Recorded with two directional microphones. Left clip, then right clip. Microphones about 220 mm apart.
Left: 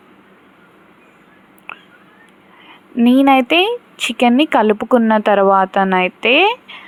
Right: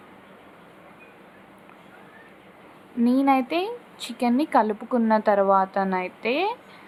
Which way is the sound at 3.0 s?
25° left (ahead or behind).